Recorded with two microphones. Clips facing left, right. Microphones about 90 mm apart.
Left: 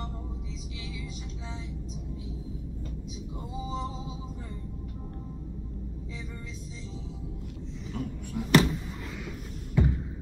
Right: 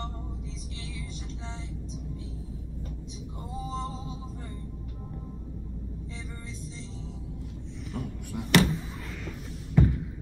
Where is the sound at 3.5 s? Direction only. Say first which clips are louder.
Even; 10° left (ahead or behind).